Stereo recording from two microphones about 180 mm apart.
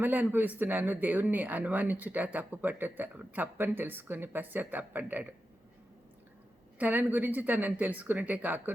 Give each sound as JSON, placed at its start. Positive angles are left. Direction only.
{"t": 0.0, "sound": "speech", "side_deg": -10}
{"t": 6.7, "sound": "speech", "side_deg": -10}